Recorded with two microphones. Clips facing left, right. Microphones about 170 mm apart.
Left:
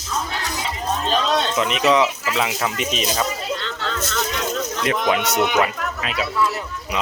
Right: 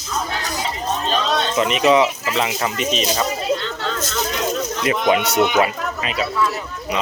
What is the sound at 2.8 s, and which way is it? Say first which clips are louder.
Speech: right 3 dB; 10° left (ahead or behind).